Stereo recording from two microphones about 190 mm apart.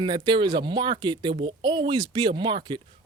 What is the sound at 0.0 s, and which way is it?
Speech, 25° right (ahead or behind).